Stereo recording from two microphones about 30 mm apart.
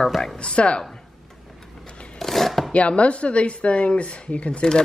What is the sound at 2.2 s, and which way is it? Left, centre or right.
Chopping, centre.